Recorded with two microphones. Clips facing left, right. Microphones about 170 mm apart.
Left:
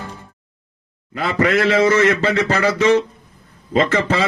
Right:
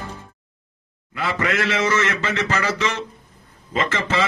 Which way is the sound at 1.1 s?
40° left (ahead or behind).